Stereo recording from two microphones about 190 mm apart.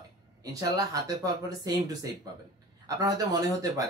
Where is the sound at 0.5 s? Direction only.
20° right (ahead or behind).